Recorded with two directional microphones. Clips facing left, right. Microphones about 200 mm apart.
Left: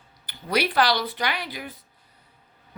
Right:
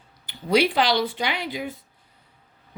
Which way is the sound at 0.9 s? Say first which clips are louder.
Right 3 dB; 25° right (ahead or behind).